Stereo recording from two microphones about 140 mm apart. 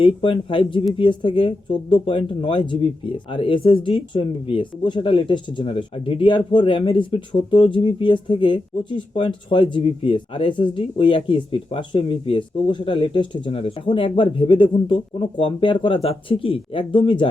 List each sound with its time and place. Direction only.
0.0 s speech: 40° left (ahead or behind)